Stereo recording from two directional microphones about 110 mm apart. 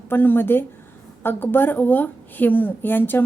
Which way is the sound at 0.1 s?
20° left (ahead or behind).